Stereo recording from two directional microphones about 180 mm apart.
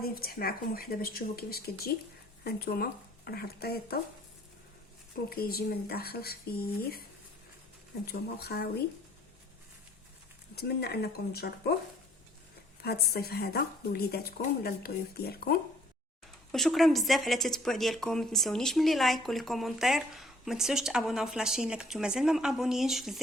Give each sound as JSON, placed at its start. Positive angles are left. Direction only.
{"t": 0.0, "sound": "speech", "side_deg": 55}
{"t": 5.3, "sound": "speech", "side_deg": 55}
{"t": 8.0, "sound": "speech", "side_deg": 60}
{"t": 10.5, "sound": "speech", "side_deg": 65}
{"t": 12.8, "sound": "speech", "side_deg": 60}
{"t": 16.5, "sound": "a woman's voice", "side_deg": 0}